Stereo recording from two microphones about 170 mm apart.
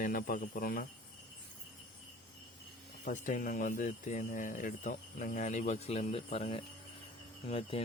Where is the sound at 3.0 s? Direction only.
50° left (ahead or behind).